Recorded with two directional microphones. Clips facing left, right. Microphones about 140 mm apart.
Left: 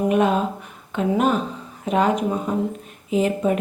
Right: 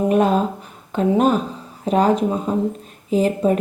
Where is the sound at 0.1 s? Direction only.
35° right (ahead or behind).